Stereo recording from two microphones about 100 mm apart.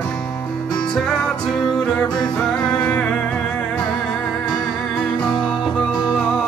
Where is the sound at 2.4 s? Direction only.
10° left (ahead or behind).